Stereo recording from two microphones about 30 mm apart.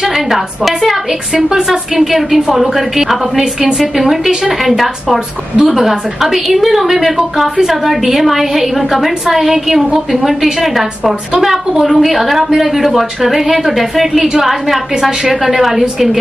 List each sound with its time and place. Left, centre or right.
1.3 s a woman's voice: centre
4.6 s a woman's voice: centre
12.4 s speech: centre
12.8 s a woman's voice: centre